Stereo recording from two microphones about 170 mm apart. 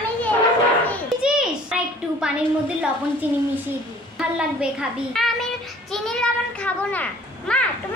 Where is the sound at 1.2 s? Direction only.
5° right (ahead or behind).